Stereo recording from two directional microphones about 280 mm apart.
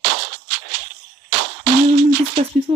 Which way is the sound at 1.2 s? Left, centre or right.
Right.